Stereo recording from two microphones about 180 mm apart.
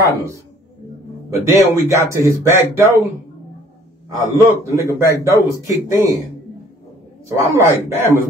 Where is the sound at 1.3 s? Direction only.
15° right (ahead or behind).